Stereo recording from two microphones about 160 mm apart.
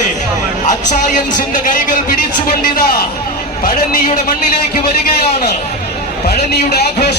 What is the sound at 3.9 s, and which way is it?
Speech, 60° left (ahead or behind).